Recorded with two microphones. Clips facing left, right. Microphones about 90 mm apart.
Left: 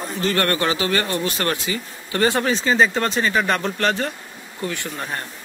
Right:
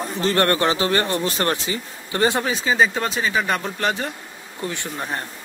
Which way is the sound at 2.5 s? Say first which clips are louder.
Left 1 dB; 5° right (ahead or behind).